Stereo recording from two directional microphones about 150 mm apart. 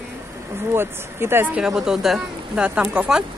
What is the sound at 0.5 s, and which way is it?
Speech, 15° right (ahead or behind).